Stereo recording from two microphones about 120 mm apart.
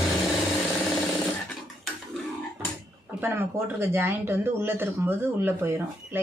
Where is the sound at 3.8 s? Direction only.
20° right (ahead or behind).